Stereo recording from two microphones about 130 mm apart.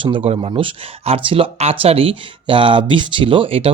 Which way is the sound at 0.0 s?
40° right (ahead or behind).